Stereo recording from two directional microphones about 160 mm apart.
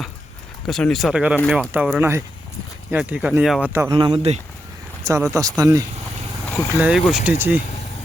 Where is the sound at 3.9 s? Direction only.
30° right (ahead or behind).